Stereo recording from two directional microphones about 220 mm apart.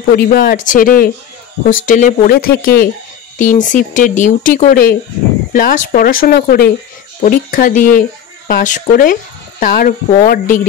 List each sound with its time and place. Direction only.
0.1 s speech: 45° left (ahead or behind)